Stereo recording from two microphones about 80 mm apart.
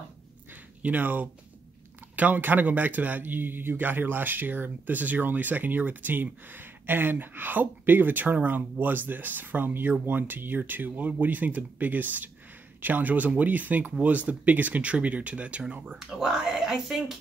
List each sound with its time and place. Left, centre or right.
0.5 s a sound: right
2.1 s a man's voice: right
16.0 s speech: centre